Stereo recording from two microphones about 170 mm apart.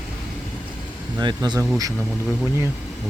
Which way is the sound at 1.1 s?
25° right (ahead or behind).